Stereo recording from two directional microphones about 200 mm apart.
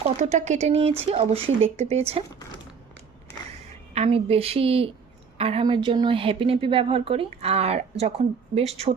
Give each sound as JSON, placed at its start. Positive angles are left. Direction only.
{"t": 0.2, "sound": "speech", "side_deg": -35}
{"t": 3.9, "sound": "a woman's voice", "side_deg": -30}